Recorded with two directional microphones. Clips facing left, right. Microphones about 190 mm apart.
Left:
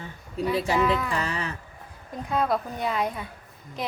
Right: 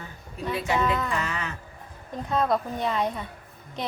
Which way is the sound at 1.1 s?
35° left (ahead or behind).